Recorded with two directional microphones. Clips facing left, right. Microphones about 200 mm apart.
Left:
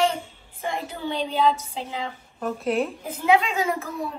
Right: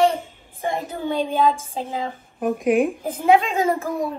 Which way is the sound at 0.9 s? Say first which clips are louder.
Right 4 dB; 50° right (ahead or behind).